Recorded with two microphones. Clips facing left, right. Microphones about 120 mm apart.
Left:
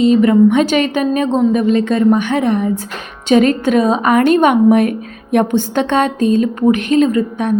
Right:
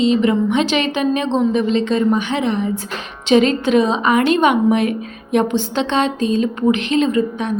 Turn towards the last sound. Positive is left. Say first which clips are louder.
# left 3 dB
turn(degrees=50)  # may be behind; listen again after turning